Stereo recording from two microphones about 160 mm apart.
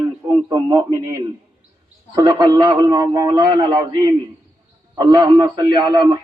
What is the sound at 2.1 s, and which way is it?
A man's voice, 25° right (ahead or behind).